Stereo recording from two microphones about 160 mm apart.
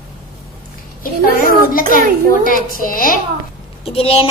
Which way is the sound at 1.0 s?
65° left (ahead or behind).